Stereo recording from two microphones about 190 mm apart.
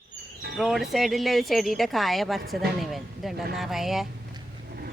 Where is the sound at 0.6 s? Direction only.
Centre (ahead or behind).